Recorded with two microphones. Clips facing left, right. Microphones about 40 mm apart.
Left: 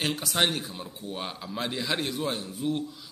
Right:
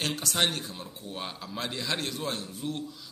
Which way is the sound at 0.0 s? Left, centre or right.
Centre.